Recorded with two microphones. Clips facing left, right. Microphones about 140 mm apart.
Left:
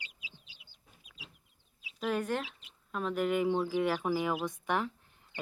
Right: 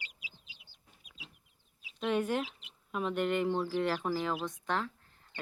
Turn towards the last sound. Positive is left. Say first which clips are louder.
# left 2 dB
turn(degrees=15)  # may be behind; listen again after turning